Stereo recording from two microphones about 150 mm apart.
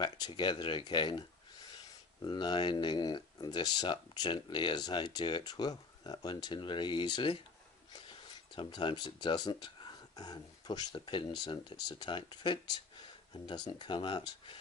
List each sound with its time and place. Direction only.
0.0 s speech: 30° left (ahead or behind)
2.2 s speech: 30° left (ahead or behind)